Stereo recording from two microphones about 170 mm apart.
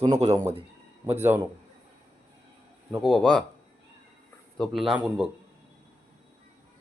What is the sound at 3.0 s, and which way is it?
Speech, centre (ahead or behind).